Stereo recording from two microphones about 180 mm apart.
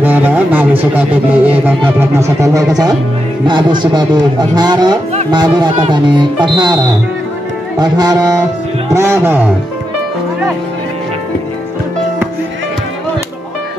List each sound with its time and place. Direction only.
0.0 s a man's voice: 10° right (ahead or behind); by 6.8 s 25° right (ahead or behind)
7.8 s a man's voice: 20° right (ahead or behind)